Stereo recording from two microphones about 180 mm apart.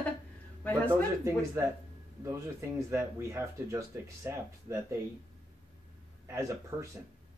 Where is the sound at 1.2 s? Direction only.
15° right (ahead or behind).